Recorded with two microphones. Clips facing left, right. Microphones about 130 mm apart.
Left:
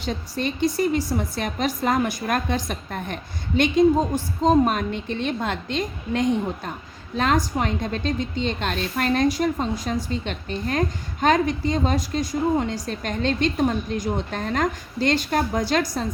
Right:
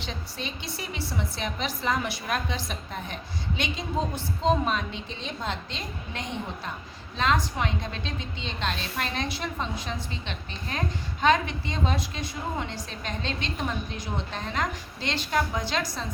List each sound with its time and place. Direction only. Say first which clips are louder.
0.0 s a woman's voice: left 9 dB; 50° left (ahead or behind)